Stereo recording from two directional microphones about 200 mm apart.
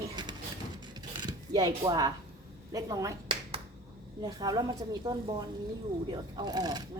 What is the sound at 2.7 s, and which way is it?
A woman's voice, 15° right (ahead or behind).